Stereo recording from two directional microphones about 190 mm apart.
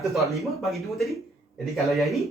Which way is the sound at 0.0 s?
Centre (ahead or behind).